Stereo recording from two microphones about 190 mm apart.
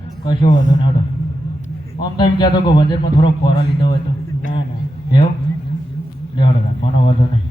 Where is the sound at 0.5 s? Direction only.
40° left (ahead or behind).